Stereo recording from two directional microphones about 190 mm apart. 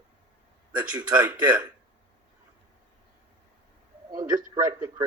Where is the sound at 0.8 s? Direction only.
20° right (ahead or behind).